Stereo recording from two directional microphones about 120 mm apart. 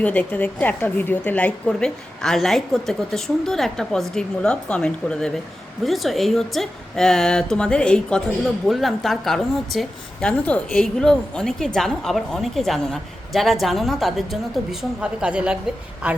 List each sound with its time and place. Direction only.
0.0 s a woman's voice: 10° left (ahead or behind); by 16.2 s 10° right (ahead or behind)